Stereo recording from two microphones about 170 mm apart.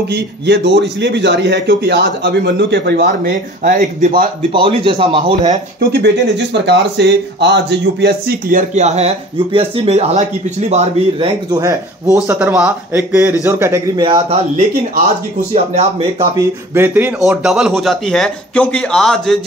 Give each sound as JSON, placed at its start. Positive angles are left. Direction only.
{"t": 0.1, "sound": "speech", "side_deg": -85}
{"t": 4.5, "sound": "speech", "side_deg": -30}
{"t": 5.8, "sound": "speech", "side_deg": -70}
{"t": 12.3, "sound": "speech", "side_deg": -10}
{"t": 14.0, "sound": "speech", "side_deg": -30}
{"t": 15.5, "sound": "speech", "side_deg": -40}
{"t": 16.2, "sound": "speech", "side_deg": -15}